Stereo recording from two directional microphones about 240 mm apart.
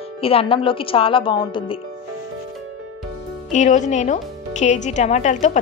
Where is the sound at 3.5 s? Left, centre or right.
Left.